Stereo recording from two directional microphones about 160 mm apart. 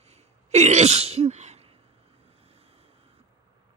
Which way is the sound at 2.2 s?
40° right (ahead or behind).